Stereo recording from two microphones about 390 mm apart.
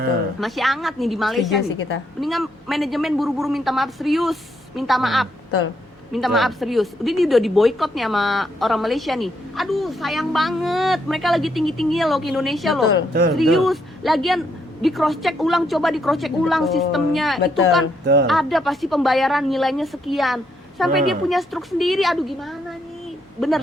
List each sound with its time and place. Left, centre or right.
0.3 s speech: centre
18.0 s speech: right
18.3 s speech: centre